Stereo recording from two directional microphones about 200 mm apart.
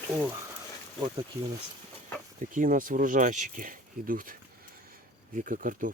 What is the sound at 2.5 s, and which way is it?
Speech, 40° right (ahead or behind).